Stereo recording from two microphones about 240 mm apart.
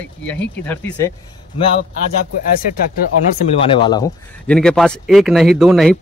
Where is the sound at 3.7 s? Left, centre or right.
Centre.